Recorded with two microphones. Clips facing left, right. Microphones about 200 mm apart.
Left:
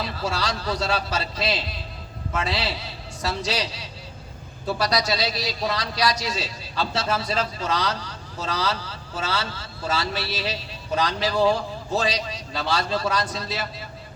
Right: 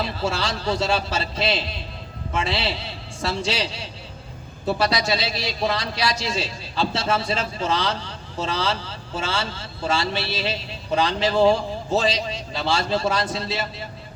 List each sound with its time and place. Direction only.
0.0 s a man's voice: 25° right (ahead or behind)